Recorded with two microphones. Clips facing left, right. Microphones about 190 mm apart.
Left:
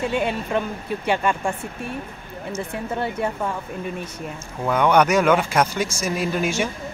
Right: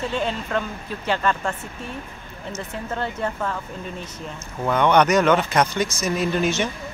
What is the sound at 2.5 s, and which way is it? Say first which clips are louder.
Speech: left 3 dB; 10° left (ahead or behind).